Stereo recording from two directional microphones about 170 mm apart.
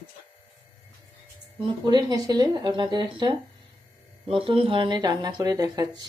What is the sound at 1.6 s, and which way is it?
Speech, 25° right (ahead or behind).